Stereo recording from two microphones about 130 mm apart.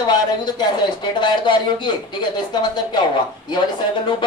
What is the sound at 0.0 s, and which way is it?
Speech, 35° left (ahead or behind).